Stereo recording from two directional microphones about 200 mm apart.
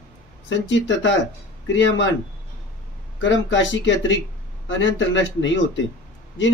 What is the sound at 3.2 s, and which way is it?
A man's voice, 70° left (ahead or behind).